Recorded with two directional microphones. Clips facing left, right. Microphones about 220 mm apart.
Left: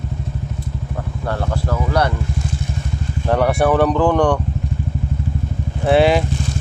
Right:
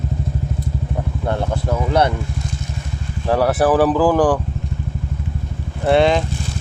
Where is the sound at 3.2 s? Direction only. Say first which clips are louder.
Even; 5° right (ahead or behind).